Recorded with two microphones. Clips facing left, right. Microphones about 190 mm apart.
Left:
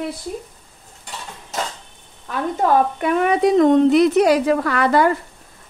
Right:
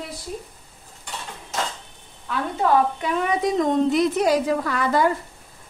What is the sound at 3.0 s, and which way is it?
Speech, 60° left (ahead or behind).